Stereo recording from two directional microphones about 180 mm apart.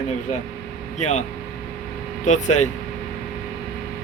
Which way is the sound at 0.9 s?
40° left (ahead or behind).